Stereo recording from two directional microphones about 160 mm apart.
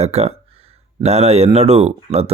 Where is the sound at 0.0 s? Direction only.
40° right (ahead or behind).